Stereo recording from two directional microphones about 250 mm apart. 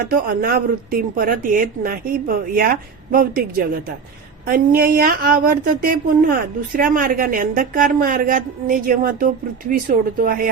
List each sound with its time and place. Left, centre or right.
0.0 s a woman's voice: right
4.4 s a woman's voice: right